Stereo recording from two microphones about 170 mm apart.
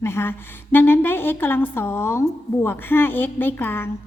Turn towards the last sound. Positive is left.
turn(degrees=10)  # may be behind; listen again after turning